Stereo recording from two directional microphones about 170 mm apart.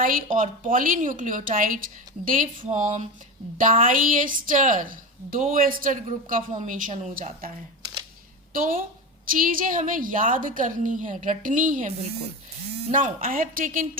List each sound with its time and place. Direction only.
0.0 s a woman's voice: 55° right (ahead or behind)
8.5 s a woman's voice: 55° right (ahead or behind)
12.9 s a woman's voice: 50° right (ahead or behind)